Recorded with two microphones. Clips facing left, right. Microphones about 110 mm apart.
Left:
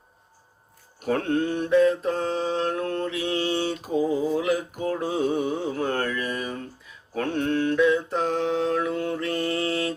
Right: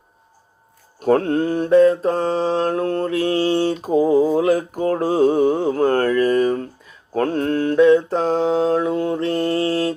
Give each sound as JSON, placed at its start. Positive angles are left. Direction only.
{"t": 0.9, "sound": "mantra", "side_deg": -35}
{"t": 8.4, "sound": "mantra", "side_deg": -25}